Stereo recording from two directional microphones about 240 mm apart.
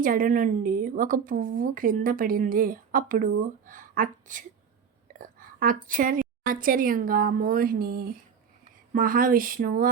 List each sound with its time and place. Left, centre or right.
0.0 s a woman's voice: right